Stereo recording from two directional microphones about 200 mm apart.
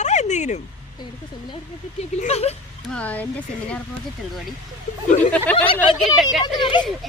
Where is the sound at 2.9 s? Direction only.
5° left (ahead or behind).